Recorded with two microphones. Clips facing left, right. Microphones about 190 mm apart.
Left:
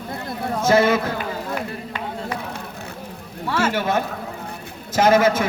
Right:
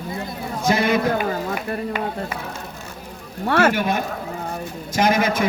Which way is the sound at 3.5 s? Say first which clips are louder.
Right 5 dB; 60° right (ahead or behind).